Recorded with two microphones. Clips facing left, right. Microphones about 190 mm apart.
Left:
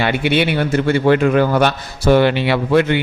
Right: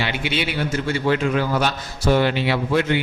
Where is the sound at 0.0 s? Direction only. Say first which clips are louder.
Left 8 dB; 55° left (ahead or behind).